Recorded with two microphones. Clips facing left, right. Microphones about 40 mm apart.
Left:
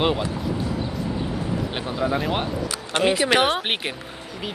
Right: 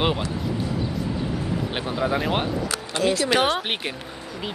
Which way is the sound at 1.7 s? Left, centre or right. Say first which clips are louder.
Right 1 dB; centre.